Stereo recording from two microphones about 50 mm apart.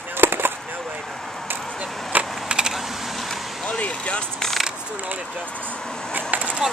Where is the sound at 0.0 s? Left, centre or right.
Right.